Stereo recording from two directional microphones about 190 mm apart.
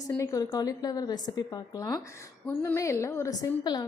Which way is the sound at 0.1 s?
15° left (ahead or behind).